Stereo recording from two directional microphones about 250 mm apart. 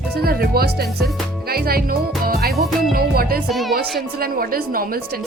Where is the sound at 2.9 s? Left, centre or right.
Right.